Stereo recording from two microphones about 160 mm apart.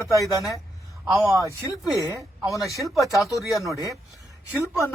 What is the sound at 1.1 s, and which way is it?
Speech, centre (ahead or behind).